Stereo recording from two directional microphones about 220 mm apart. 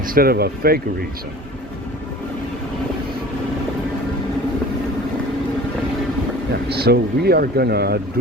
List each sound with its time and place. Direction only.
0.0 s speech: 40° right (ahead or behind)
6.7 s speech: 45° right (ahead or behind)